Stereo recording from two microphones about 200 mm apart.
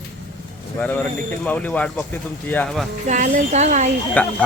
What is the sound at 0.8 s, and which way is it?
Speech, 5° left (ahead or behind).